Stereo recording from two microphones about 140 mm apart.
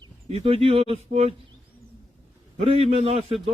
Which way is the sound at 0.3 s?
45° right (ahead or behind).